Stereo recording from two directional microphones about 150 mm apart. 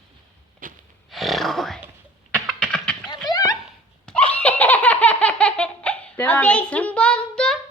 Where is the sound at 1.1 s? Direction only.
Centre (ahead or behind).